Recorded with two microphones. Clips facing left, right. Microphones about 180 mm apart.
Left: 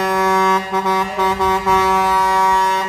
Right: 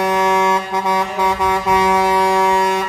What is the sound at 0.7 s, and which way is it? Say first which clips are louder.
Music: even; 10° right (ahead or behind).